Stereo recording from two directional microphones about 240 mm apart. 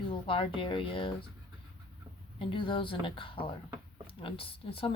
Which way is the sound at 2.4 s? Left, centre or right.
Left.